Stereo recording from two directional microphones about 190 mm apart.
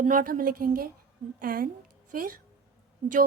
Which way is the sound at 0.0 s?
45° right (ahead or behind).